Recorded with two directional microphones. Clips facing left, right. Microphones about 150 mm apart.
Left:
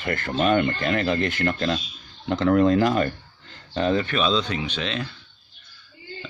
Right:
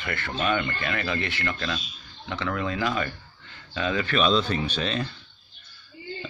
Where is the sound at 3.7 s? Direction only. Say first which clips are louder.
Left 5 dB; 35° left (ahead or behind).